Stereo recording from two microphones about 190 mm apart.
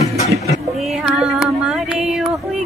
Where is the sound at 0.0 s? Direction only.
35° left (ahead or behind).